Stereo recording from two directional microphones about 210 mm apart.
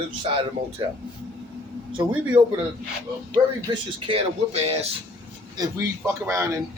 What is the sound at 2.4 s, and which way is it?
Speech, 20° right (ahead or behind).